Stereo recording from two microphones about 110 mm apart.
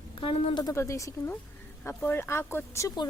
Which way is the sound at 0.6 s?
25° left (ahead or behind).